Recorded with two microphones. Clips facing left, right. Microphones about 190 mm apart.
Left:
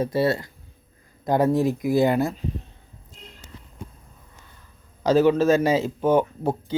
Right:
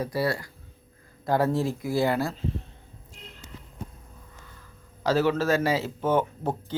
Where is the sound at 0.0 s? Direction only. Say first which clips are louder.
Left 5 dB; 25° left (ahead or behind).